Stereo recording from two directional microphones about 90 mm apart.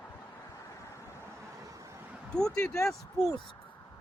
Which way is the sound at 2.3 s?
10° left (ahead or behind).